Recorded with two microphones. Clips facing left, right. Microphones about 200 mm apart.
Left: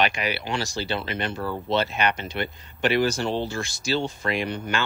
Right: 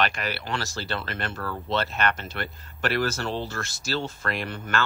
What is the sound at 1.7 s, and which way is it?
Speech, centre (ahead or behind).